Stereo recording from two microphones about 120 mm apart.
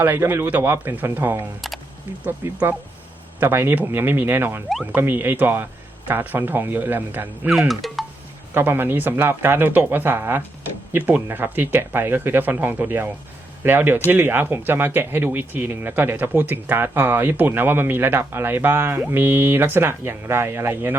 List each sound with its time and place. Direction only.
0.0 s speech: 15° right (ahead or behind)
4.7 s speech: centre (ahead or behind)
4.9 s speech: 20° right (ahead or behind)
7.7 s speech: centre (ahead or behind)
8.5 s speech: 20° right (ahead or behind)